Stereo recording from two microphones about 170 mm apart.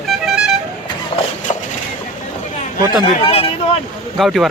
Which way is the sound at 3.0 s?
35° left (ahead or behind).